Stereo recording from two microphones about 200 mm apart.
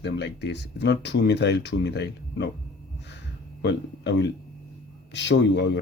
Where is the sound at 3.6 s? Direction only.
60° left (ahead or behind).